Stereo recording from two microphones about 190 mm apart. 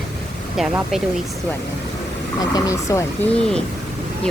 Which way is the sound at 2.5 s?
15° left (ahead or behind).